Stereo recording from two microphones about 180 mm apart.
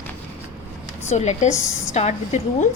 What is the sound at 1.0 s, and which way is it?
A woman's voice, 40° left (ahead or behind).